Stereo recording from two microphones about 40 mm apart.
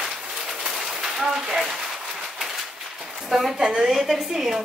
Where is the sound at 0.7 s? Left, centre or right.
Centre.